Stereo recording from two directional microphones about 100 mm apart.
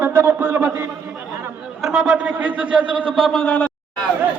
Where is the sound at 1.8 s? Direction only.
5° right (ahead or behind).